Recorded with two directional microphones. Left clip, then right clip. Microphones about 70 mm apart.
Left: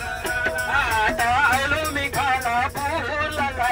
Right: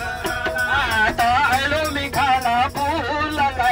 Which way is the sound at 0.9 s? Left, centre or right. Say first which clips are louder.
Right 4 dB; right.